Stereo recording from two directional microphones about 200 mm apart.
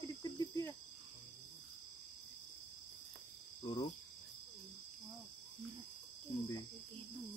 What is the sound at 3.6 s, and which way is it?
Insect, 20° left (ahead or behind).